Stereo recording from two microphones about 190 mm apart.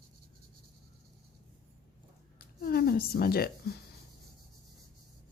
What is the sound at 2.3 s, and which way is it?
Speech, 50° left (ahead or behind).